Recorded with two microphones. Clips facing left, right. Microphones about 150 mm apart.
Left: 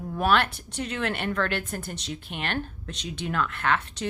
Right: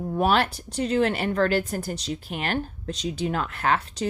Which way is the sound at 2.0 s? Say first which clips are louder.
Right 5 dB; centre (ahead or behind).